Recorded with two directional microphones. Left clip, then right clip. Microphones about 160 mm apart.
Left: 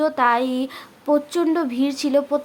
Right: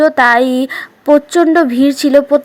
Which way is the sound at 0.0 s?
30° right (ahead or behind).